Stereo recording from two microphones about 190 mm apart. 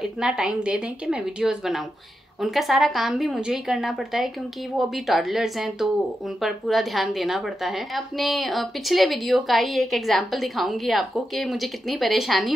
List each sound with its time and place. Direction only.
0.0 s speech: 5° right (ahead or behind)